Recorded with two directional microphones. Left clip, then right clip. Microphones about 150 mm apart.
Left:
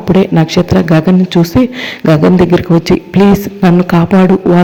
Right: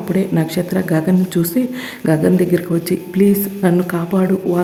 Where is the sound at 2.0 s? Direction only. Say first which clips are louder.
Left 7 dB; 30° left (ahead or behind).